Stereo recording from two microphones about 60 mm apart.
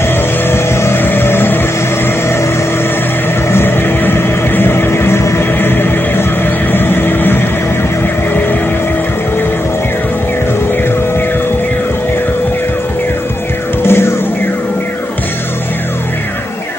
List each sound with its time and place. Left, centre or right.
0.5 s vehicle: left
3.5 s vehicle: left
5.6 s a sound: left
13.8 s music: left